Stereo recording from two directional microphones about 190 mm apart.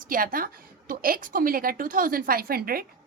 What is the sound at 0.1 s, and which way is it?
A woman's voice, 50° right (ahead or behind).